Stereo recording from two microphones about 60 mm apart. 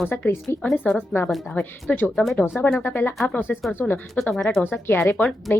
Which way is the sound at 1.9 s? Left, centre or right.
Left.